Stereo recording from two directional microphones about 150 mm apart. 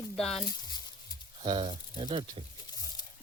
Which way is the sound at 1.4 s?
35° right (ahead or behind).